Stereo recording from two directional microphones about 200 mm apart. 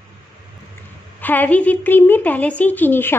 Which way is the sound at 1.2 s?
10° left (ahead or behind).